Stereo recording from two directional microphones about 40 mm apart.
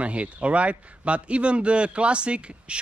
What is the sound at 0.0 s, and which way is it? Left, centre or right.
A man's voice, right.